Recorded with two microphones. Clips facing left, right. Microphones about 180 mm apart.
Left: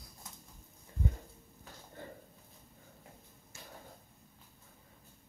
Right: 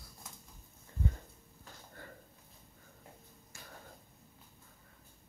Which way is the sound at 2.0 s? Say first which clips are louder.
Left 5 dB; 20° left (ahead or behind).